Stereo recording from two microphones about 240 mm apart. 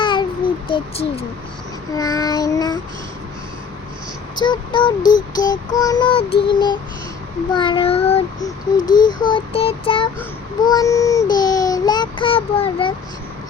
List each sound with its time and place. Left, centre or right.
0.0 s babbling: left
2.0 s child singing: centre
4.4 s music: centre
8.8 s child singing: centre
9.2 s music: left
10.6 s child singing: centre